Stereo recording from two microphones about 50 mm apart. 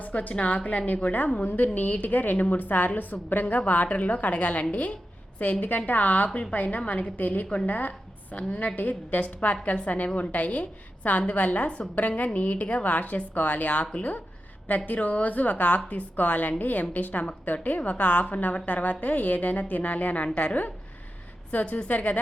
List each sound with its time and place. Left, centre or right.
0.0 s a woman's voice: left